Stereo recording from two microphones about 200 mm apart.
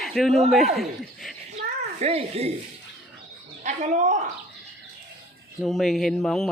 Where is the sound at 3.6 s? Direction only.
35° right (ahead or behind).